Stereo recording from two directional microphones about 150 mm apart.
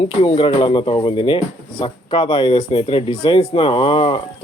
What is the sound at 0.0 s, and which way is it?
Speech, 35° left (ahead or behind).